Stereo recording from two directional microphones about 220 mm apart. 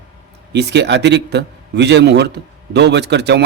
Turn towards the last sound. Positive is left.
turn(degrees=-50)  # may be behind; listen again after turning